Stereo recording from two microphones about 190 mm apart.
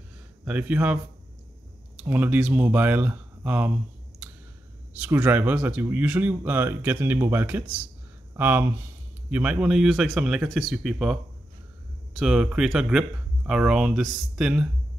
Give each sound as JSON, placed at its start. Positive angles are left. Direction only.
{"t": 0.5, "sound": "speech", "side_deg": -5}
{"t": 2.0, "sound": "speech", "side_deg": -10}
{"t": 4.9, "sound": "speech", "side_deg": -10}